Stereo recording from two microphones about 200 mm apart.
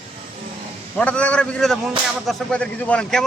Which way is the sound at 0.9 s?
5° left (ahead or behind).